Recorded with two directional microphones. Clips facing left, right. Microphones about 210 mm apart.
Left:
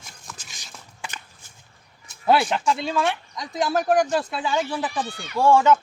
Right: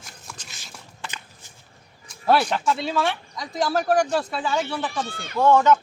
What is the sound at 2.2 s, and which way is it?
Speech, 5° left (ahead or behind).